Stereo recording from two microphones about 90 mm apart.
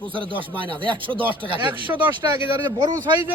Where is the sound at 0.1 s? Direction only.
70° right (ahead or behind).